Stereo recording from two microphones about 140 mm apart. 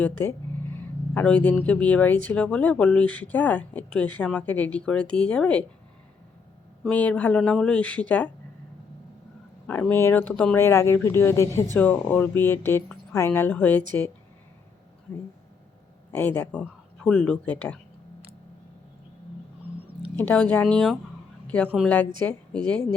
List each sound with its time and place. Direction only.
0.2 s speech: 15° left (ahead or behind)
6.8 s speech: 10° left (ahead or behind)
9.9 s speech: 15° left (ahead or behind)
16.1 s speech: 15° left (ahead or behind)
20.1 s speech: 10° left (ahead or behind)
21.4 s a sound: 10° left (ahead or behind)
22.3 s speech: 5° left (ahead or behind)